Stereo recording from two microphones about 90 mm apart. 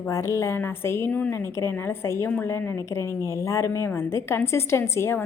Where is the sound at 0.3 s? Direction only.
30° left (ahead or behind).